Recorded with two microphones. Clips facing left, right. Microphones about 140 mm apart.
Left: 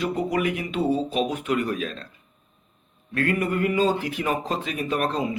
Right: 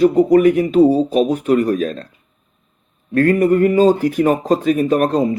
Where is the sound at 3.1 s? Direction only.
40° right (ahead or behind).